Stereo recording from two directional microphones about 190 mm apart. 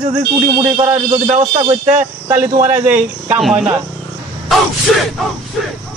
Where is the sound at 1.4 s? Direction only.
25° right (ahead or behind).